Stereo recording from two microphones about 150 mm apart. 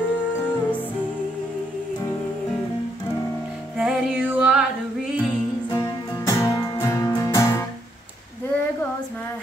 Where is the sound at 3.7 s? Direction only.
10° right (ahead or behind).